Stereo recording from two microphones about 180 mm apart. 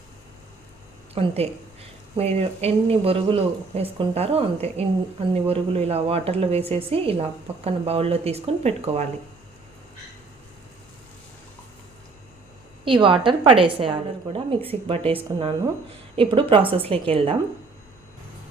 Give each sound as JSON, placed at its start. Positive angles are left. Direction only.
{"t": 1.1, "sound": "a woman's voice", "side_deg": -35}
{"t": 12.8, "sound": "a woman's voice", "side_deg": -25}